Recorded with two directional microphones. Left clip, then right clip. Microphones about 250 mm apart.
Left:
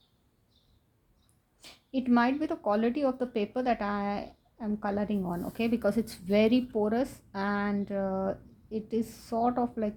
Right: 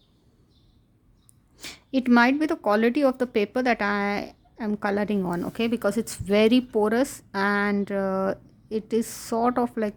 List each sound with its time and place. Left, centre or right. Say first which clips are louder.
1.5 s speech: right 7 dB; right